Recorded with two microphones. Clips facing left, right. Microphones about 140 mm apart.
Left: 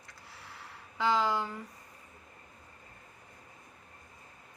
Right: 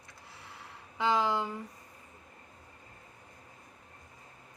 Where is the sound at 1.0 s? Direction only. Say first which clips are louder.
Even; 20° right (ahead or behind).